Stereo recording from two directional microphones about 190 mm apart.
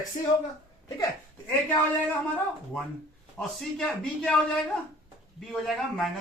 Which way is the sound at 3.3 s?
5° left (ahead or behind).